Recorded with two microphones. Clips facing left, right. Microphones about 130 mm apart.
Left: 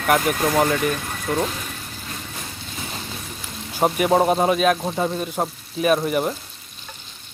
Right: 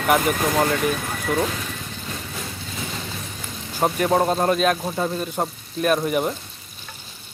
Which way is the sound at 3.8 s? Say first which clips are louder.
Left 2 dB; 5° left (ahead or behind).